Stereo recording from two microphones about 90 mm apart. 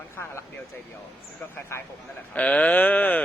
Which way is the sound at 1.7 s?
30° left (ahead or behind).